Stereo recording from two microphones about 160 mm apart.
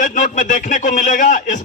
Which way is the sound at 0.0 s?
55° left (ahead or behind).